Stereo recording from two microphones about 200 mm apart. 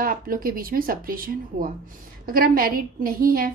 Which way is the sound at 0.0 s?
45° right (ahead or behind).